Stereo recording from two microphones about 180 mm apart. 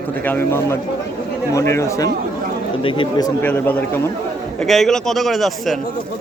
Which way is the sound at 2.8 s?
25° left (ahead or behind).